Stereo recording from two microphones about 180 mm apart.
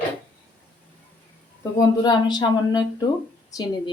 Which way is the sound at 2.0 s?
25° left (ahead or behind).